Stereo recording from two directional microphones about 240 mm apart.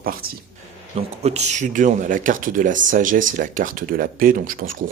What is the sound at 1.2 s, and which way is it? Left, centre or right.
Speech, right.